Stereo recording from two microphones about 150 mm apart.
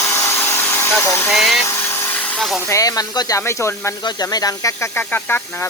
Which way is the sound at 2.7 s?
25° left (ahead or behind).